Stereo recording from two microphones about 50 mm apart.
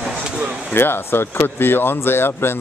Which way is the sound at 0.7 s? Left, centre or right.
Left.